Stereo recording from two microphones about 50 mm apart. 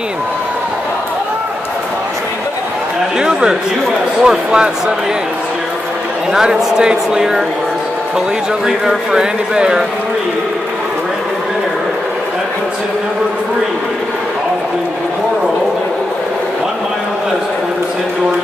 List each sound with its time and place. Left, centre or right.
3.2 s a sound: centre
4.2 s a man's voice: centre
6.3 s a man's voice: centre
8.6 s a man's voice: centre